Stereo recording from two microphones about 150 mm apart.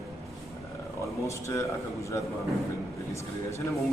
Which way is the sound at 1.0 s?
20° left (ahead or behind).